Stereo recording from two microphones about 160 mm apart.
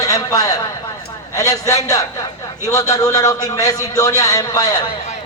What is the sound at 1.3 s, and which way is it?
A man's voice, 20° left (ahead or behind).